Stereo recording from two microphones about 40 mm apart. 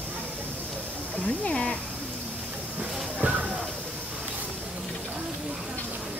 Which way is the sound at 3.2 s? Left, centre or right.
Right.